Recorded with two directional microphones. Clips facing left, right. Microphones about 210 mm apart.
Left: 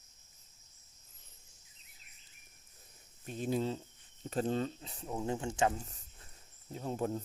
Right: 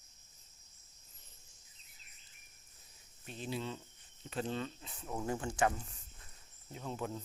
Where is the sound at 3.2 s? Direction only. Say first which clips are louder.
Left 7 dB; 45° left (ahead or behind).